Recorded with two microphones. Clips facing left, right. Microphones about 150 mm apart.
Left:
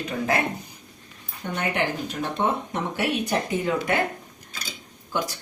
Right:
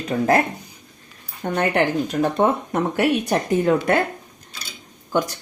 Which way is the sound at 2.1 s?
45° right (ahead or behind).